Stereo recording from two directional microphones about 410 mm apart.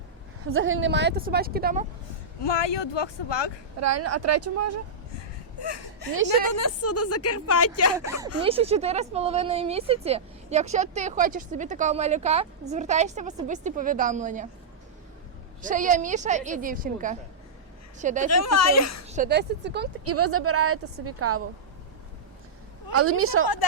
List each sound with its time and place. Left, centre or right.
0.4 s speech: right
2.4 s speech: left
3.8 s speech: right
5.1 s a sound: left
6.5 s speech: left
8.4 s speech: centre
15.6 s speech: centre
18.3 s speech: left
19.0 s speech: centre
23.0 s speech: right